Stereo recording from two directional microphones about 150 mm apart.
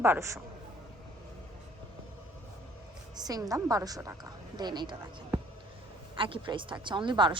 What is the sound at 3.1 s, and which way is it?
A woman's voice, 25° right (ahead or behind).